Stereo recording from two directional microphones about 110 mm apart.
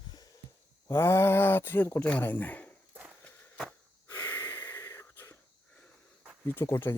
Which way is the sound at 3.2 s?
5° left (ahead or behind).